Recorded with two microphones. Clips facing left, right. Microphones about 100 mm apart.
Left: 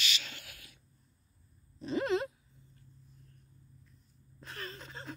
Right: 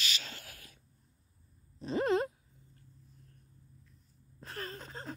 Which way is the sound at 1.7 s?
35° right (ahead or behind).